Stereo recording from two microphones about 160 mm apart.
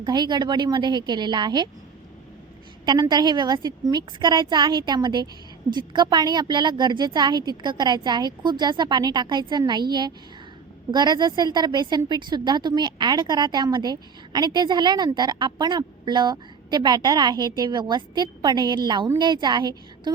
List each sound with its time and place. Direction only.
0.0 s a woman's voice: 25° right (ahead or behind)
2.8 s a woman's voice: 25° right (ahead or behind)
10.9 s a woman's voice: 25° right (ahead or behind)